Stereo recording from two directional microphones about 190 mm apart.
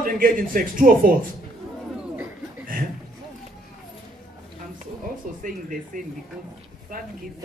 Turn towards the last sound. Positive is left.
turn(degrees=-45)  # may be behind; listen again after turning